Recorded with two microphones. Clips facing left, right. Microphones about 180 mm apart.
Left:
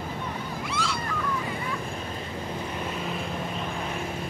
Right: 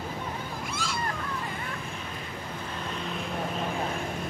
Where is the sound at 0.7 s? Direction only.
45° right (ahead or behind).